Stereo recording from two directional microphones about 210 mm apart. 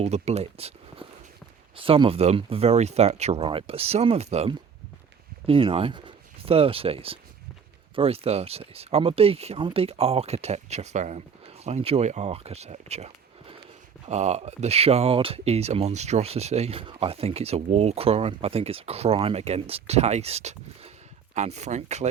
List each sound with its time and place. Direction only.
0.0 s speech: 30° right (ahead or behind)